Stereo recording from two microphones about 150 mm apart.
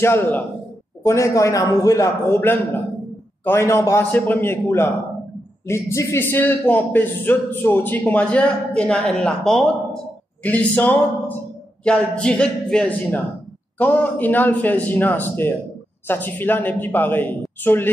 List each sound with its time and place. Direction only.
0.0 s a man's voice: 15° left (ahead or behind)